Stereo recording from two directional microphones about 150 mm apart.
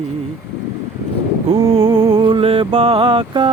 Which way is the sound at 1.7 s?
35° right (ahead or behind).